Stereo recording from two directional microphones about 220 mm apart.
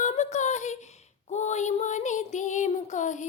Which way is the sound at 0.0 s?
30° left (ahead or behind).